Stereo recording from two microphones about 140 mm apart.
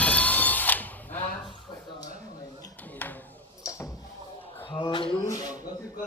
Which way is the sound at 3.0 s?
15° left (ahead or behind).